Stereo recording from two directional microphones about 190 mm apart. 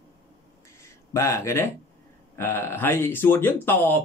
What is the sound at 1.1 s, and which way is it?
Speech, 15° left (ahead or behind).